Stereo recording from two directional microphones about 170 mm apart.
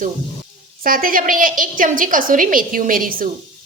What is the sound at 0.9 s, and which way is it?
A woman's voice, 55° right (ahead or behind).